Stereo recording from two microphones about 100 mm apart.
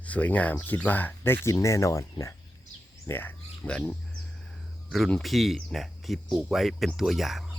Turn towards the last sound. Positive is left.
turn(degrees=-5)  # may be behind; listen again after turning